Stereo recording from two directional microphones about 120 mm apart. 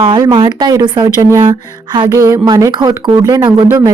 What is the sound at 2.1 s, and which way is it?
Speech, 30° right (ahead or behind).